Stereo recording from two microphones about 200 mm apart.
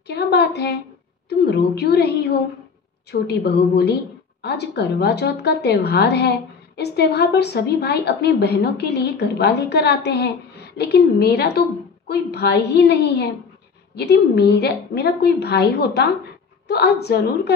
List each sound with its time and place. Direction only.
0.0 s a woman's voice: 55° left (ahead or behind)